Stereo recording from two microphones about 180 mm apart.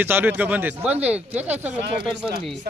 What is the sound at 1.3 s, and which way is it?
Speech, 10° right (ahead or behind).